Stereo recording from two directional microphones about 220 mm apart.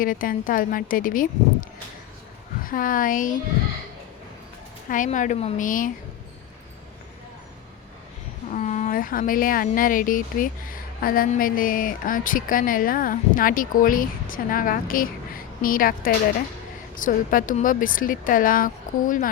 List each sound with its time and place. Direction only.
0.0 s a woman's voice: 40° left (ahead or behind)
2.6 s a woman's voice: 40° left (ahead or behind)
4.9 s a woman's voice: 35° left (ahead or behind)
8.4 s a woman's voice: 35° left (ahead or behind)